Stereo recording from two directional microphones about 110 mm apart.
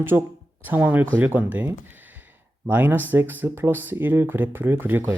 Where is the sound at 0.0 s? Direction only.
20° right (ahead or behind).